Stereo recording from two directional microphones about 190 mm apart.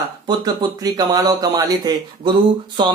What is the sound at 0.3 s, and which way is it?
Speech, 20° right (ahead or behind).